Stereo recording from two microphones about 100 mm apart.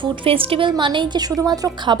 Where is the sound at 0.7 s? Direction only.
50° right (ahead or behind); by 1.7 s 35° right (ahead or behind).